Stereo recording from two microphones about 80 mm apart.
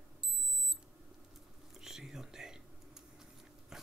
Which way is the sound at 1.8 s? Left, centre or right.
Centre.